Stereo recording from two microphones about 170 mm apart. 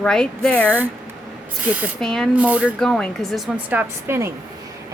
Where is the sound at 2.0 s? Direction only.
5° left (ahead or behind).